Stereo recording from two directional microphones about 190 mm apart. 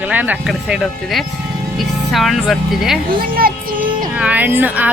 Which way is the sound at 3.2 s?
50° right (ahead or behind).